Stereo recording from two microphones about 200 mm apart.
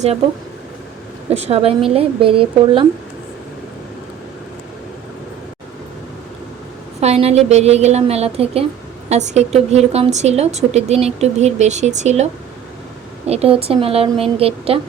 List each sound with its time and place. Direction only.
1.3 s a woman's voice: 30° right (ahead or behind)
7.0 s a woman's voice: 30° right (ahead or behind)